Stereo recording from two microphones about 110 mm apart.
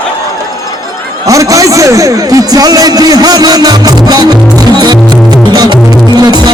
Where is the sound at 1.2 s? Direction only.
30° right (ahead or behind).